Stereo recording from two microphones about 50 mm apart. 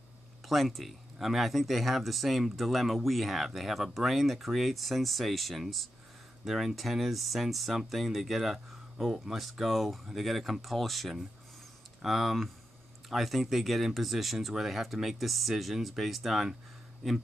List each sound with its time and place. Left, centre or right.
0.5 s speech: centre